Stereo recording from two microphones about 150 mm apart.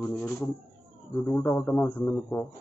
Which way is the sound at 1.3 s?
20° left (ahead or behind).